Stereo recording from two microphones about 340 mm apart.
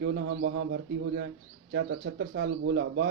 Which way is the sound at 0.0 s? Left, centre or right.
Right.